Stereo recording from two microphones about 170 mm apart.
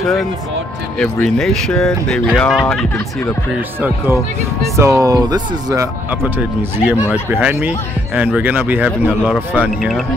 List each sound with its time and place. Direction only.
0.0 s speech: centre (ahead or behind)
4.7 s speech: 20° right (ahead or behind)
6.9 s speech: 10° right (ahead or behind)